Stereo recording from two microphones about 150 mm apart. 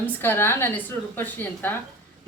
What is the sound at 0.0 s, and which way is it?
A woman's voice, 15° left (ahead or behind).